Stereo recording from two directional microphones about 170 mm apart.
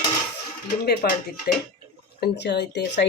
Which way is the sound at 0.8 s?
70° left (ahead or behind).